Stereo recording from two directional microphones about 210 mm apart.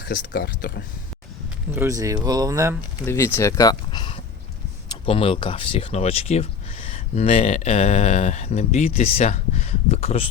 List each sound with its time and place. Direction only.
0.0 s speech: 50° left (ahead or behind)
1.7 s speech: 15° right (ahead or behind)
3.1 s speech: 10° left (ahead or behind); by 10.2 s 30° left (ahead or behind)